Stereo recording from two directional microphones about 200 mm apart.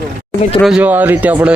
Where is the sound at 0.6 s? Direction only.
5° right (ahead or behind).